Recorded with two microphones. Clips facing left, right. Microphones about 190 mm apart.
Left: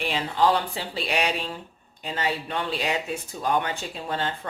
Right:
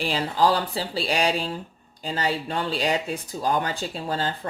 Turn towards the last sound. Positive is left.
turn(degrees=-35)  # may be behind; listen again after turning